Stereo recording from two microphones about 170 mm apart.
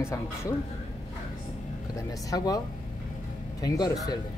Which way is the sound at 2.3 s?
20° left (ahead or behind).